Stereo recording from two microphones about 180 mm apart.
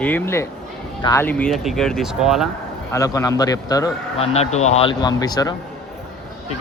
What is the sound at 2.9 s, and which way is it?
Speech, 15° left (ahead or behind).